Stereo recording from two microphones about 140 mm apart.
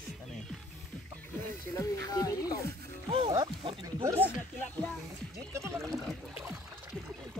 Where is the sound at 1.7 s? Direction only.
25° left (ahead or behind).